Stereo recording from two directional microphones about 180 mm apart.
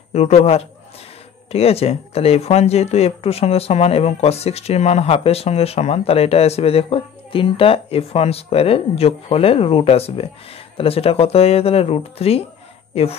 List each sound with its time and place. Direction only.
0.1 s speech: 40° left (ahead or behind)